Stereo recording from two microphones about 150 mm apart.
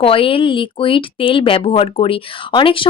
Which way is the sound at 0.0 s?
35° left (ahead or behind).